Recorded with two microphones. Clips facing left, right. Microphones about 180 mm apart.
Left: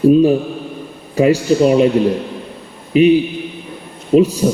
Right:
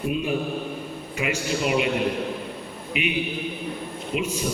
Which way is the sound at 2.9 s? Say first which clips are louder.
Left 17 dB; 35° left (ahead or behind).